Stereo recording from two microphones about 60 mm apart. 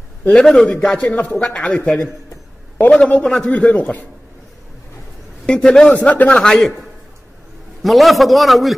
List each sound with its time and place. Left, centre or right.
0.4 s speech: centre
3.5 s a man's voice: left
5.5 s speech: centre
7.8 s a man's voice: centre